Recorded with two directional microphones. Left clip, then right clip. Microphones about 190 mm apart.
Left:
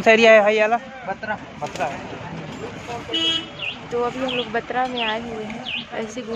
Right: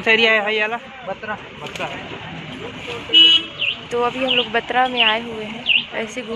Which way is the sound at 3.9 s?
Centre (ahead or behind).